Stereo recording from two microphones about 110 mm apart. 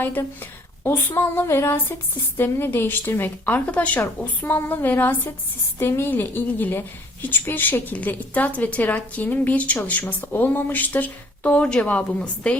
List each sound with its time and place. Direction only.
0.0 s a woman's voice: 15° left (ahead or behind)